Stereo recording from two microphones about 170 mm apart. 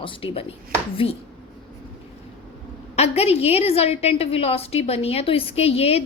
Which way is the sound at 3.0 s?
35° left (ahead or behind).